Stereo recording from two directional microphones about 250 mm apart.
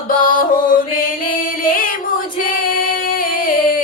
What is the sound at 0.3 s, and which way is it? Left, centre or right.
Music, left.